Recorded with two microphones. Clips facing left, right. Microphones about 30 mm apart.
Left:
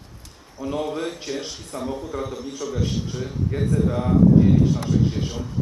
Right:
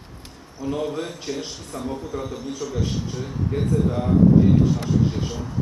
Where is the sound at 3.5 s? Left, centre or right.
Centre.